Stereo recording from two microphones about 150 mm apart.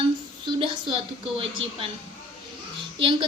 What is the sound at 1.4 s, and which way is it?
Speech, 35° right (ahead or behind).